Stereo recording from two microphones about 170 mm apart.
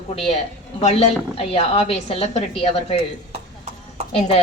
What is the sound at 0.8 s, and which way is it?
A woman's voice, 40° left (ahead or behind).